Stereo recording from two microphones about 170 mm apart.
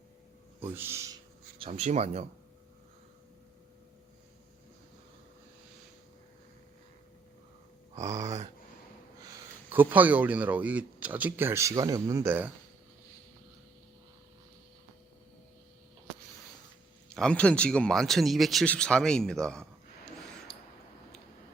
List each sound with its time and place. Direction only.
0.8 s speech: 15° right (ahead or behind)
1.5 s speech: 35° right (ahead or behind)
9.6 s speech: 10° right (ahead or behind)
17.1 s speech: 5° left (ahead or behind)